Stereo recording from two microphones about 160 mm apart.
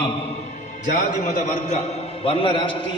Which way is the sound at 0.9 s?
55° left (ahead or behind).